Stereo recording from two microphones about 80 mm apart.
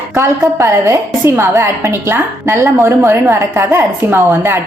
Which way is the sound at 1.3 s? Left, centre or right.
Right.